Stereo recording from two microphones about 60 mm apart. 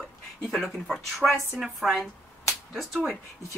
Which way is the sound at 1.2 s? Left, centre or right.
Centre.